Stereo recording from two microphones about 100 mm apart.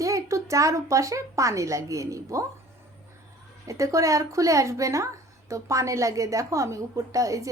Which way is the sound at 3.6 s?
30° right (ahead or behind).